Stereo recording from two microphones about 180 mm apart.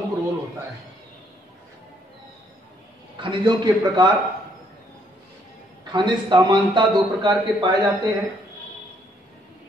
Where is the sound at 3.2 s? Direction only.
25° right (ahead or behind).